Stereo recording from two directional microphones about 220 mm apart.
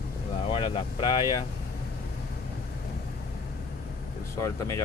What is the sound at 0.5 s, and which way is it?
Speech, 25° left (ahead or behind).